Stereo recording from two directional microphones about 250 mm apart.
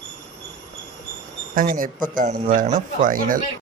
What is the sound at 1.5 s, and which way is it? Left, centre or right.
Speech, right.